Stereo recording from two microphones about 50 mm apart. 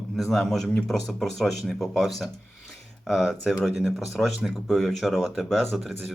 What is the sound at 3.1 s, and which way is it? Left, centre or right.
Speech, centre.